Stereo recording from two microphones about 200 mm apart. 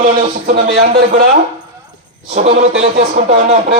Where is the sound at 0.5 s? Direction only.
55° right (ahead or behind).